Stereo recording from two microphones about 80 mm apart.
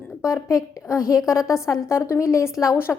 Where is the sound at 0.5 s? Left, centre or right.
Left.